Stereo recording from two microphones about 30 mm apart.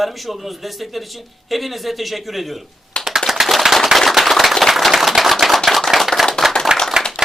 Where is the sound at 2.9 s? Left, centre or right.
Left.